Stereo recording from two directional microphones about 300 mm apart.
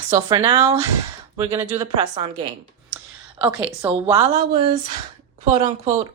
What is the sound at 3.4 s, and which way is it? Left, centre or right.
Speech, centre.